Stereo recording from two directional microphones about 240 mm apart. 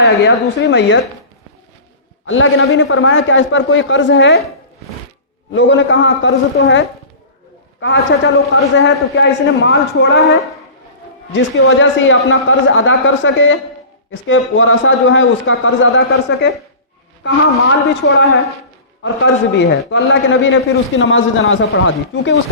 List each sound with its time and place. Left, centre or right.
0.0 s a man's voice: left
2.2 s a man's voice: left
5.5 s a man's voice: left
11.6 s a man's voice: left